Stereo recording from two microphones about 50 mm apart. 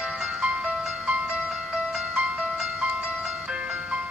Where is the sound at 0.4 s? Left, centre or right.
Right.